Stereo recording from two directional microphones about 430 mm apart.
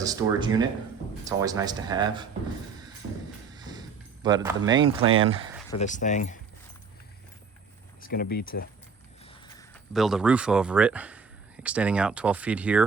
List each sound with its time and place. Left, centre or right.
0.0 s speech: centre
3.5 s a sound: centre
5.1 s speech: centre
5.7 s speech: centre
8.0 s speech: left
9.6 s speech: centre